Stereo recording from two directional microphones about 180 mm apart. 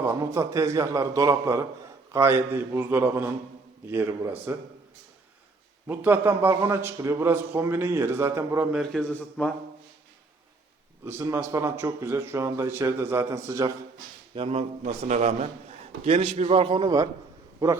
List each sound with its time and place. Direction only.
0.0 s a man's voice: 15° right (ahead or behind)
5.9 s a man's voice: 10° right (ahead or behind)
8.8 s a man's voice: centre (ahead or behind)
11.0 s a man's voice: 15° right (ahead or behind)
14.3 s a man's voice: 35° right (ahead or behind)